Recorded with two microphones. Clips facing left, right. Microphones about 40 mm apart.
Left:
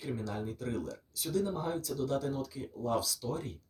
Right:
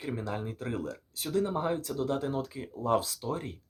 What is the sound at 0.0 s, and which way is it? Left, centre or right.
Speech, right.